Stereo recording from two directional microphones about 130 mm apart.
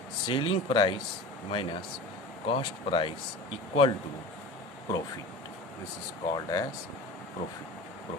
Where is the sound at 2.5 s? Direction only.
45° left (ahead or behind).